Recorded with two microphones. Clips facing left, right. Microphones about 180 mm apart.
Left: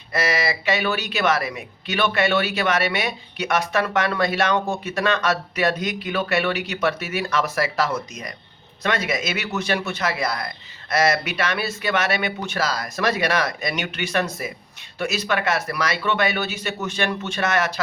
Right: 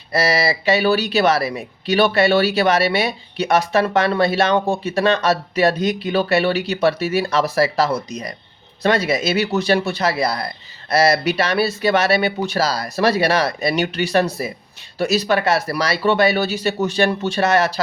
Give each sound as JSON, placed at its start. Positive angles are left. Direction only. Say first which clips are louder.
{"t": 0.1, "sound": "speech", "louder": "right 5 dB", "side_deg": -35}